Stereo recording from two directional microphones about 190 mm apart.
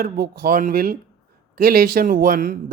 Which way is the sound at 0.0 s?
50° right (ahead or behind).